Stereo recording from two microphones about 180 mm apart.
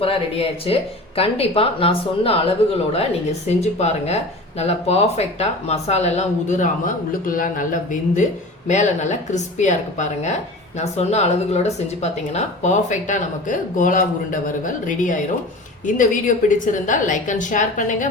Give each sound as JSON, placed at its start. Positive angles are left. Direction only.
{"t": 0.0, "sound": "a woman's voice", "side_deg": 30}